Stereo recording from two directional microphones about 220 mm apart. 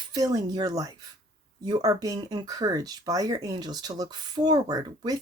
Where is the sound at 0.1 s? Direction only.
15° right (ahead or behind).